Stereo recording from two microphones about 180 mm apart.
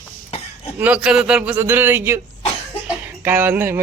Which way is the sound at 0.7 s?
10° right (ahead or behind).